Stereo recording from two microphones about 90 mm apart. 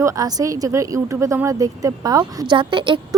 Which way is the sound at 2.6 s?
65° right (ahead or behind).